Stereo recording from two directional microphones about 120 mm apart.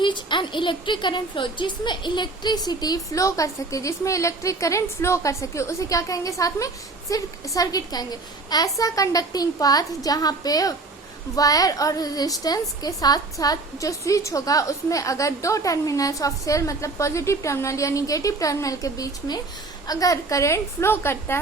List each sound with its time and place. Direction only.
0.0 s a woman's voice: 40° left (ahead or behind); by 21.3 s 20° left (ahead or behind)